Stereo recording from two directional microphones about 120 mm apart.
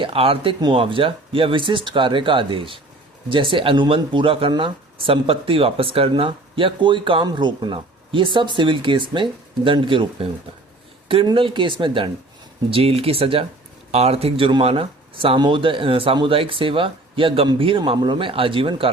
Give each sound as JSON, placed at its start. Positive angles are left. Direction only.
{"t": 0.0, "sound": "speech", "side_deg": -50}
{"t": 12.7, "sound": "speech", "side_deg": -55}
{"t": 15.4, "sound": "speech", "side_deg": -40}